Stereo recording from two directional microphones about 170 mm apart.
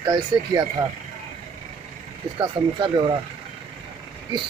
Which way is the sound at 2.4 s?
25° right (ahead or behind).